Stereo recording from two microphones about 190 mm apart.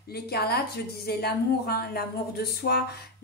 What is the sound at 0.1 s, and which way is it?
A woman's voice, 55° left (ahead or behind).